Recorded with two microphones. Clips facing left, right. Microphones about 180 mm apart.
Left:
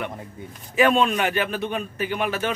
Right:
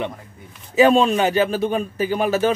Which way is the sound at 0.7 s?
25° right (ahead or behind).